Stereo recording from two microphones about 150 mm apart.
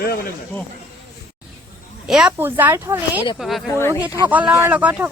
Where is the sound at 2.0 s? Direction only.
5° right (ahead or behind).